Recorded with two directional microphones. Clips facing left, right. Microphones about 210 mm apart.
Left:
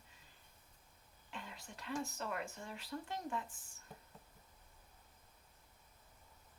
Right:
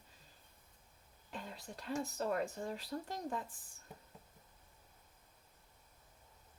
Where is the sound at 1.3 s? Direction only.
40° right (ahead or behind).